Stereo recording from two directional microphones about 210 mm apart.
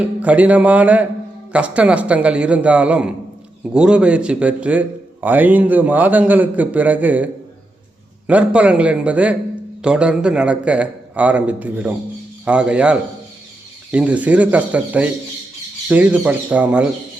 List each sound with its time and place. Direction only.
0.0 s a man's voice: 5° right (ahead or behind)
8.3 s a man's voice: 5° right (ahead or behind)